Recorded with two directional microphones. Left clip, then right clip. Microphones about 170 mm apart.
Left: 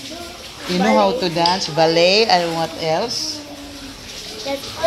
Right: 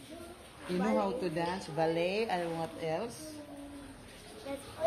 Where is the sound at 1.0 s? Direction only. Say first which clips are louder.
Left 17 dB; 25° left (ahead or behind).